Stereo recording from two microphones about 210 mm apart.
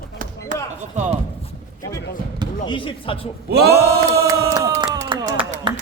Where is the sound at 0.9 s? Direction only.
35° right (ahead or behind).